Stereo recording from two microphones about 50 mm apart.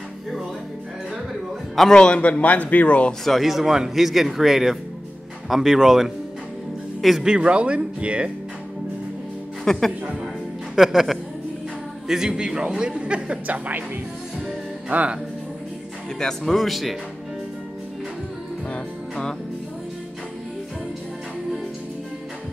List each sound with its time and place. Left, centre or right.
2.0 s speech: left
3.3 s speech: centre
7.2 s a man's voice: right
9.7 s speech: centre
10.8 s a man's voice: centre; by 13.6 s right
14.9 s speech: right
16.2 s speech: centre
18.7 s music: centre